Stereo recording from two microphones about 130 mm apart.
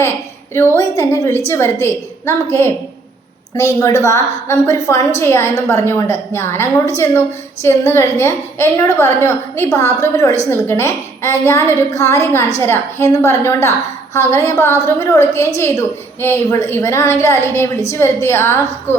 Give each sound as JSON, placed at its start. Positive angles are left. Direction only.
{"t": 0.8, "sound": "a woman's voice", "side_deg": 25}